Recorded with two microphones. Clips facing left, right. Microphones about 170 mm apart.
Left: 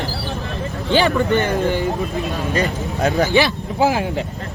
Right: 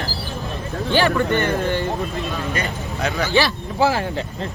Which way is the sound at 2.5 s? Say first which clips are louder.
Left 5 dB; 40° left (ahead or behind).